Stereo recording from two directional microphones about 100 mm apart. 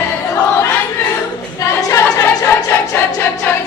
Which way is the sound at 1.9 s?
30° left (ahead or behind).